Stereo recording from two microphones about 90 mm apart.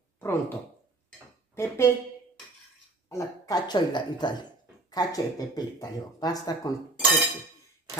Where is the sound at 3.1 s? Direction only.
40° left (ahead or behind).